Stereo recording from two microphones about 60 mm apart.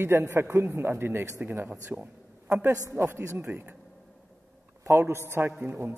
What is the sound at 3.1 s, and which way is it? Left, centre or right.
Speech, right.